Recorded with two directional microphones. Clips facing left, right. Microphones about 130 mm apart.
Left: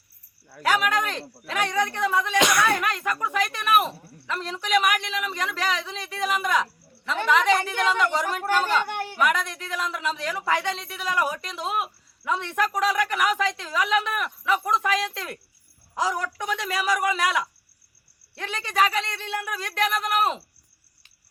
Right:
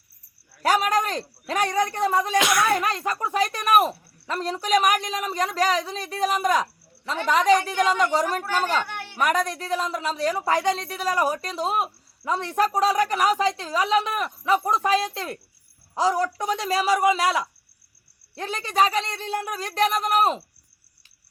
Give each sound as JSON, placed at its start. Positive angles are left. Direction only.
{"t": 0.6, "sound": "a woman's voice", "side_deg": -40}
{"t": 2.4, "sound": "speech", "side_deg": 0}
{"t": 2.8, "sound": "a woman's voice", "side_deg": -30}
{"t": 8.9, "sound": "a sound", "side_deg": 45}
{"t": 9.1, "sound": "a woman's voice", "side_deg": -40}